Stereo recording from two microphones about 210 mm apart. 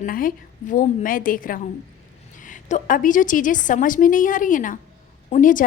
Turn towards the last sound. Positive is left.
turn(degrees=40)  # may be behind; listen again after turning